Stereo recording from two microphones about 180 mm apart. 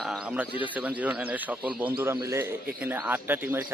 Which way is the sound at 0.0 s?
5° right (ahead or behind).